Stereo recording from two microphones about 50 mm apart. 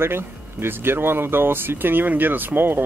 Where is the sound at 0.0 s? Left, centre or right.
Right.